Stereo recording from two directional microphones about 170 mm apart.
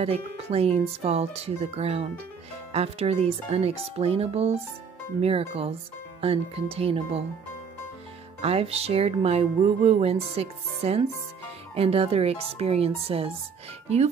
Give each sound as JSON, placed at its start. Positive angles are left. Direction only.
{"t": 0.0, "sound": "speech", "side_deg": -35}
{"t": 8.4, "sound": "speech", "side_deg": -35}